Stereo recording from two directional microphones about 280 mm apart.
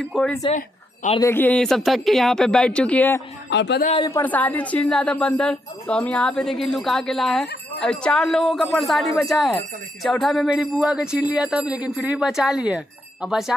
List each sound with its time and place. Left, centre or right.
0.0 s speech: centre
0.4 s speech: left
1.2 s speech: centre
3.4 s speech: left
3.9 s speech: centre